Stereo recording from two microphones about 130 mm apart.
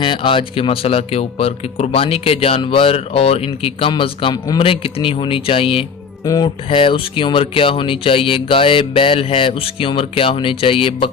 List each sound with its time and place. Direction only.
0.0 s speech: 40° left (ahead or behind)
6.2 s speech: 30° left (ahead or behind)
6.7 s speech: 45° left (ahead or behind)